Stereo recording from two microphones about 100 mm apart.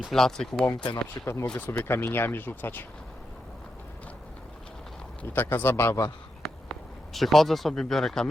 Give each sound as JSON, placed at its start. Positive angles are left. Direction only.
{"t": 0.0, "sound": "speech", "side_deg": 5}
{"t": 1.2, "sound": "speech", "side_deg": 25}
{"t": 5.3, "sound": "speech", "side_deg": 20}
{"t": 6.4, "sound": "a sound", "side_deg": 0}